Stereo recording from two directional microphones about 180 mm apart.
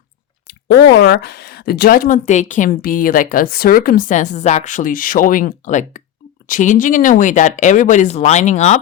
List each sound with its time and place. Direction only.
0.9 s a woman's voice: 65° left (ahead or behind); by 8.8 s 40° left (ahead or behind)